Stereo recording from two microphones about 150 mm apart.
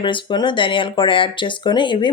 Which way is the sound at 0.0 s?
30° left (ahead or behind).